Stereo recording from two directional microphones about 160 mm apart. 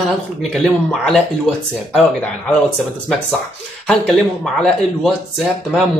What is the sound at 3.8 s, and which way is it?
Speech, centre (ahead or behind).